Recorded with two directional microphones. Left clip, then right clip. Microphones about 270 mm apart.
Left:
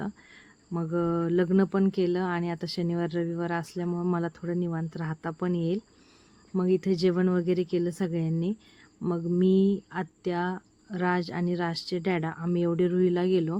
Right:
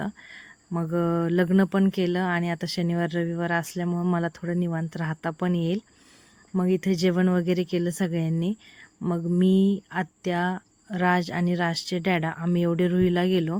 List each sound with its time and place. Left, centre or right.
0.0 s speech: right